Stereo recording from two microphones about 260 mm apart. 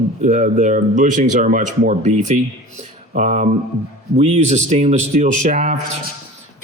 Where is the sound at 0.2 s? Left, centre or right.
Right.